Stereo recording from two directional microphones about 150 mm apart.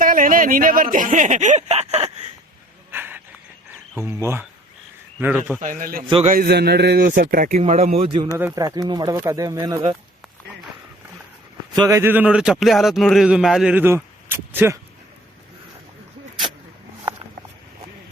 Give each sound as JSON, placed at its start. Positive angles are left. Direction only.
{"t": 0.0, "sound": "a sound", "side_deg": -65}
{"t": 2.9, "sound": "a sound", "side_deg": -15}
{"t": 4.0, "sound": "speech", "side_deg": -15}
{"t": 5.5, "sound": "a man's voice", "side_deg": -65}
{"t": 6.2, "sound": "a man's voice", "side_deg": -80}
{"t": 7.6, "sound": "a man's voice", "side_deg": -45}
{"t": 8.5, "sound": "speech", "side_deg": -25}
{"t": 11.7, "sound": "speech", "side_deg": -20}